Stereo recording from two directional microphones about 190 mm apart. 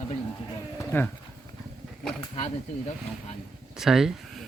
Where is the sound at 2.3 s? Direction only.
35° left (ahead or behind).